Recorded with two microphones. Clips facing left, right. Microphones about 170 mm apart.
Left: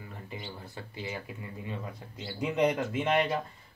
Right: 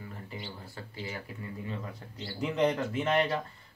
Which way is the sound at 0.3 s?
20° left (ahead or behind).